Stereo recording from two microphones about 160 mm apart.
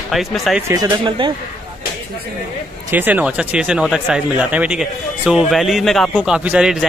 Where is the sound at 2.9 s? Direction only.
10° right (ahead or behind).